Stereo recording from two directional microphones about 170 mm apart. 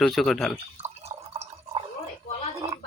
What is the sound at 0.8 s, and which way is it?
Drip, 40° right (ahead or behind).